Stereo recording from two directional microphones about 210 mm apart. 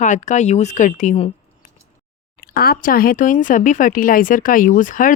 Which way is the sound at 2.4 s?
45° left (ahead or behind).